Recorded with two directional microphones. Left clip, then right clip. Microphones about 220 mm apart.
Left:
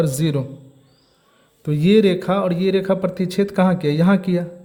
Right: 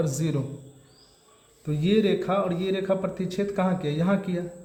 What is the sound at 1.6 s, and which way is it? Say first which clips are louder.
A man's voice: left 8 dB; 45° left (ahead or behind).